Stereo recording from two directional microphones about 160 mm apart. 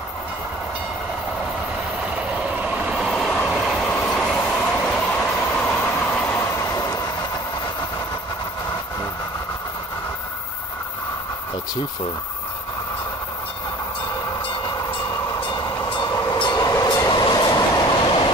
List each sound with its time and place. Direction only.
2.1 s train: 10° right (ahead or behind); by 7.0 s 20° left (ahead or behind)
15.9 s train: 25° left (ahead or behind)